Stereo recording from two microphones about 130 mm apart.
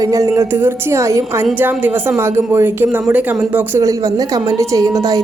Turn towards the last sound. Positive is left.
turn(degrees=-25)  # may be behind; listen again after turning